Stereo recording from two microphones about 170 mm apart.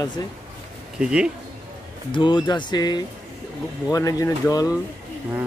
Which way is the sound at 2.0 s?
30° left (ahead or behind).